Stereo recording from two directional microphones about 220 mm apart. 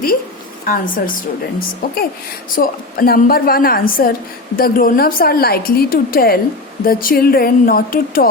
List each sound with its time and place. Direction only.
0.6 s a woman's voice: 40° left (ahead or behind)
2.6 s a woman's voice: 40° left (ahead or behind)